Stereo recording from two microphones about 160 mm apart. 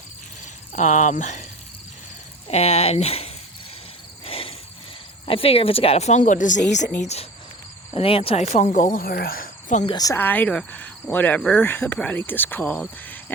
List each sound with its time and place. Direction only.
0.7 s a woman's voice: 50° left (ahead or behind)
2.5 s speech: 40° left (ahead or behind)
4.3 s cricket: 35° left (ahead or behind)
5.2 s a woman's voice: 35° left (ahead or behind); by 9.8 s 55° left (ahead or behind)
9.8 s speech: 25° left (ahead or behind)